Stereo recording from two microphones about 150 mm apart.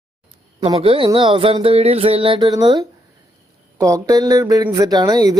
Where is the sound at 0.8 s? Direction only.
35° right (ahead or behind).